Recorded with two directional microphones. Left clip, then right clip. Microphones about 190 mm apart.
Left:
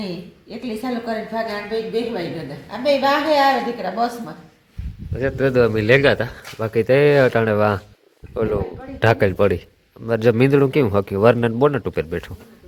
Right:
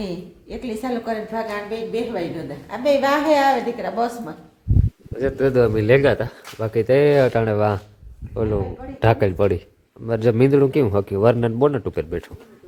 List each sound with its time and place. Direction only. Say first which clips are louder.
0.6 s a woman's voice: even; 15° right (ahead or behind)
5.1 s a man's voice: even; 10° right (ahead or behind)
9.0 s a man's voice: left 2 dB; centre (ahead or behind)